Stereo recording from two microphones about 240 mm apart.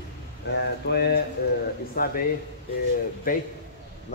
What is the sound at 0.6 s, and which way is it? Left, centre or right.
Speech, left.